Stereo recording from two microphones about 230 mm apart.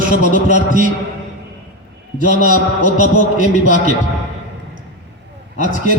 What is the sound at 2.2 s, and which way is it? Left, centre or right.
A man's voice, right.